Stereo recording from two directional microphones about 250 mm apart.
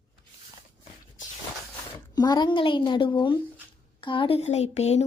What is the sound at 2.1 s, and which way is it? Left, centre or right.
Speech, centre.